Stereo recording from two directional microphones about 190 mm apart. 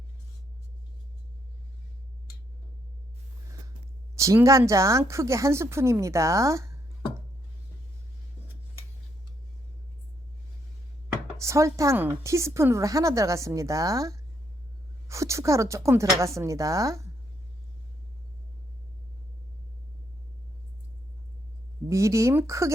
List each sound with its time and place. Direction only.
4.1 s a woman's voice: 15° right (ahead or behind)
11.3 s a woman's voice: 15° right (ahead or behind)
21.8 s a woman's voice: 15° right (ahead or behind)